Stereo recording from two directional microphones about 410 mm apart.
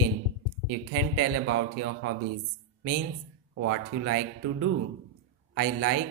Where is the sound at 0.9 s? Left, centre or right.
Right.